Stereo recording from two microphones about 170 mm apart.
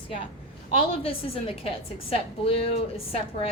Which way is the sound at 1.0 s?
35° left (ahead or behind).